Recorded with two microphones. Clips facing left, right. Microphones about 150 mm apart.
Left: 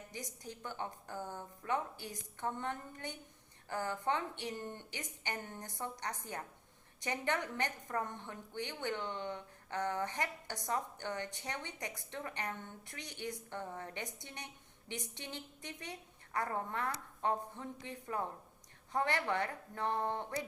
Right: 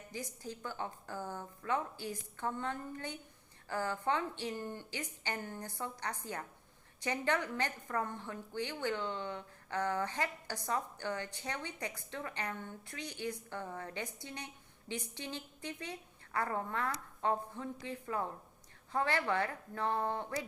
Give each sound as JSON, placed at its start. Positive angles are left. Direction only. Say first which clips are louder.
{"t": 0.1, "sound": "a woman's voice", "louder": "right 6 dB", "side_deg": 20}